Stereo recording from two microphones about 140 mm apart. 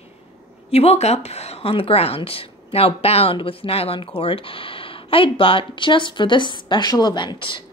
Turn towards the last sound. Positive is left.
turn(degrees=35)  # may be behind; listen again after turning